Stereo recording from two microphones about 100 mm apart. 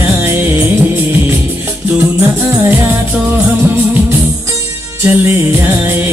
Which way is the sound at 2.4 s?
15° right (ahead or behind).